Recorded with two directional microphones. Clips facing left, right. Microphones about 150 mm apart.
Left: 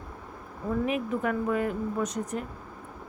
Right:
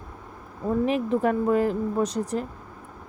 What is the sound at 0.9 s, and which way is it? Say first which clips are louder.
Speech: right 7 dB; 30° right (ahead or behind).